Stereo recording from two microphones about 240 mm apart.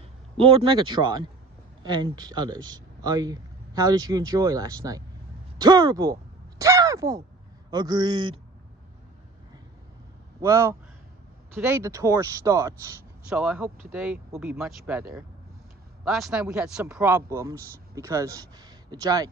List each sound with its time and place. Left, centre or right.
0.4 s speech: right
6.6 s a sound: centre
7.7 s speech: centre
10.4 s speech: centre